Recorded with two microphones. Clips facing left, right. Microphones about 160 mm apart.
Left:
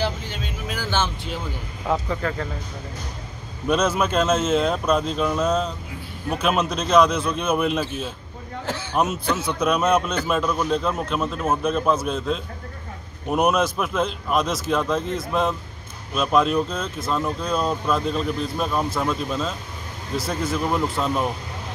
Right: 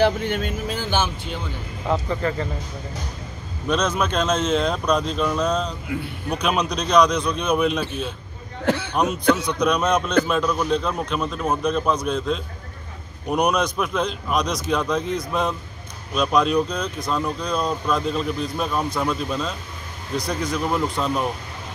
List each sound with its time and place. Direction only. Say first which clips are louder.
0.0 s vehicle: right 7 dB; 60° right (ahead or behind)
0.8 s speech: even; 10° right (ahead or behind)
1.9 s a man's voice: right 1 dB; centre (ahead or behind)
3.6 s a man's voice: left 1 dB; 5° left (ahead or behind)
8.6 s a man's voice: right 9 dB; 65° right (ahead or behind)
8.9 s a man's voice: right 1 dB; 5° left (ahead or behind)